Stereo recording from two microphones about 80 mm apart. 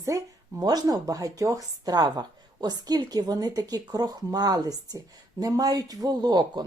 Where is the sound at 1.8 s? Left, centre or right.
Right.